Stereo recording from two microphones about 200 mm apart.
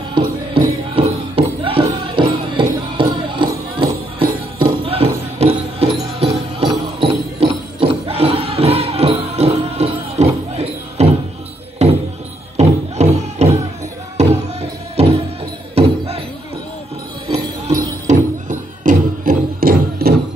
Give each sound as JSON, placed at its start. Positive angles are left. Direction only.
{"t": 0.6, "sound": "music", "side_deg": -25}
{"t": 6.7, "sound": "jingle bell", "side_deg": -25}
{"t": 11.8, "sound": "a sound", "side_deg": -30}
{"t": 12.5, "sound": "music", "side_deg": -35}
{"t": 17.3, "sound": "music", "side_deg": -20}
{"t": 18.0, "sound": "music", "side_deg": -40}